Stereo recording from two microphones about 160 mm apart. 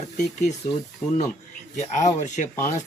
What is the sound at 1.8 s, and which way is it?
Speech, 50° left (ahead or behind).